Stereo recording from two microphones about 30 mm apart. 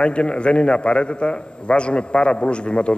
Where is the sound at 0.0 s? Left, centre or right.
Left.